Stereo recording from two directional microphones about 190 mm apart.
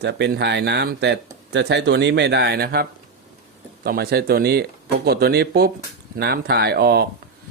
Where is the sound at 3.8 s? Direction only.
55° right (ahead or behind).